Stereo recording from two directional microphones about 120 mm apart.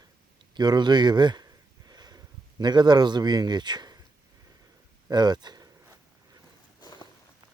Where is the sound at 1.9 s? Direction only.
35° right (ahead or behind).